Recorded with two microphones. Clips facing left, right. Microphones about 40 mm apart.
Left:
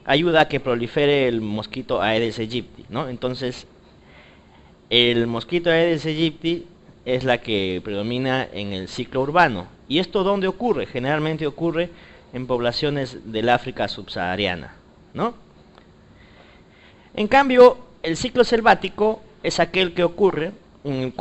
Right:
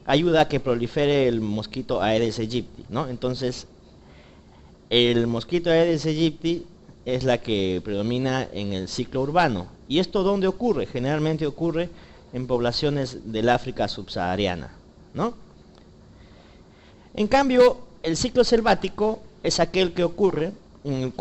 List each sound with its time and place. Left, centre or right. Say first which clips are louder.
0.0 s speech: left 2 dB; left
4.8 s speech: left 2 dB; left
17.1 s speech: left 3 dB; left